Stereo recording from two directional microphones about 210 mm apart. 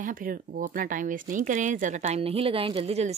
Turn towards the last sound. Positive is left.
turn(degrees=-30)  # may be behind; listen again after turning